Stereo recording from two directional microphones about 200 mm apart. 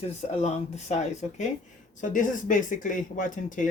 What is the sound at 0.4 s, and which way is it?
Speech, 35° left (ahead or behind).